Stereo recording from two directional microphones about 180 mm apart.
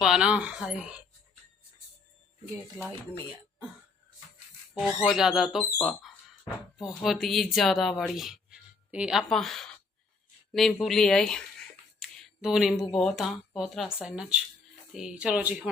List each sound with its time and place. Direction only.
0.0 s speech: 5° right (ahead or behind)
4.7 s speech: 5° right (ahead or behind)
11.9 s a sound: centre (ahead or behind)
12.9 s speech: 5° left (ahead or behind)